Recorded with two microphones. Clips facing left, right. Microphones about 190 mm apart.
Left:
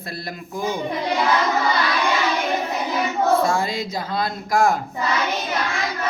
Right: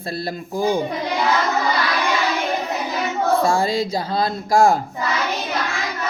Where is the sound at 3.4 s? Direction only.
30° right (ahead or behind).